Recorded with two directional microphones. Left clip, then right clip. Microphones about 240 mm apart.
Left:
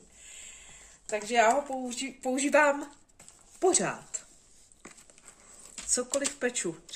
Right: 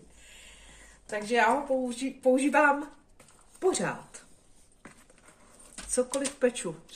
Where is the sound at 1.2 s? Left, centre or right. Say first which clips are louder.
Left 1 dB; left.